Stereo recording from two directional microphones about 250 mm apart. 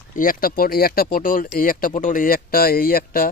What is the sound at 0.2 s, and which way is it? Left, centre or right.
Speech, left.